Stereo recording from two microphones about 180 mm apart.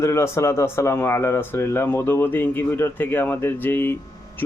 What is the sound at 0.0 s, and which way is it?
Speech, 15° left (ahead or behind).